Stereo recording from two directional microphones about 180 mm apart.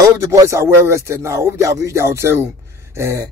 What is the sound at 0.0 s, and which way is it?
Speech, 15° right (ahead or behind).